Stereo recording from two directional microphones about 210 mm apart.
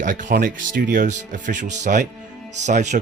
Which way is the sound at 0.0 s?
40° right (ahead or behind).